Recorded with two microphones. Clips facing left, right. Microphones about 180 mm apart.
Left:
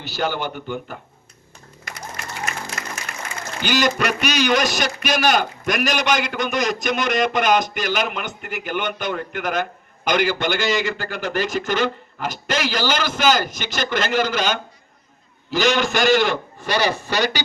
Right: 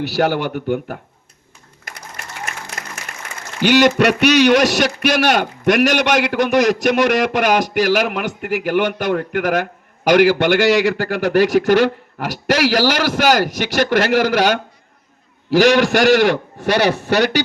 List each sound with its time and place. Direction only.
0.0 s a man's voice: 75° right (ahead or behind)
3.6 s a man's voice: 70° right (ahead or behind)